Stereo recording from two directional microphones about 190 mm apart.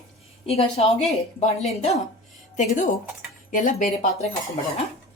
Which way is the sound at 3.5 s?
45° left (ahead or behind).